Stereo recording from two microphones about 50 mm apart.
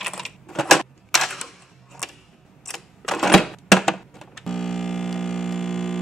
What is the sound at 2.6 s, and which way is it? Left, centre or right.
Cash register, centre.